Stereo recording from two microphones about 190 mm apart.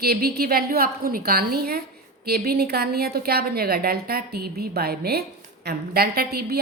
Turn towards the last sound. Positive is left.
turn(degrees=-55)  # may be behind; listen again after turning